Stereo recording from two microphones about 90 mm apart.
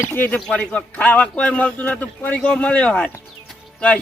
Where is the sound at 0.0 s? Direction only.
25° left (ahead or behind).